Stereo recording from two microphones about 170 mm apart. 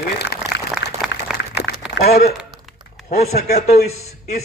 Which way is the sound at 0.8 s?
85° left.